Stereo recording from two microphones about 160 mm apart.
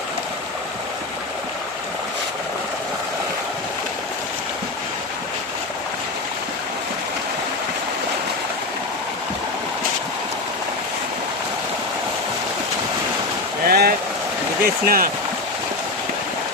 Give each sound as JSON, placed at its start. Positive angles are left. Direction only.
{"t": 13.7, "sound": "boat", "side_deg": -70}
{"t": 14.6, "sound": "speech", "side_deg": -65}